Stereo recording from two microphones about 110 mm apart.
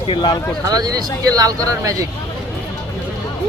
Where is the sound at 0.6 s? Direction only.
35° right (ahead or behind).